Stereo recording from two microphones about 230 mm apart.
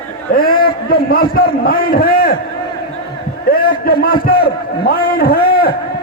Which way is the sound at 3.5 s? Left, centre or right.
Left.